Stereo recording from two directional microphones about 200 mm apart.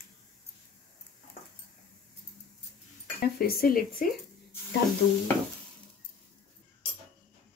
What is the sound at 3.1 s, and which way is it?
Speech, 50° left (ahead or behind).